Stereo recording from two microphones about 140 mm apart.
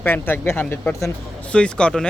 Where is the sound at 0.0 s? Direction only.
15° left (ahead or behind).